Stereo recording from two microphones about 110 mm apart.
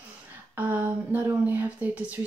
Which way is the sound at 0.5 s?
15° right (ahead or behind).